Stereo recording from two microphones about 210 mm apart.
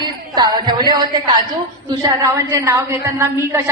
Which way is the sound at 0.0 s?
20° right (ahead or behind).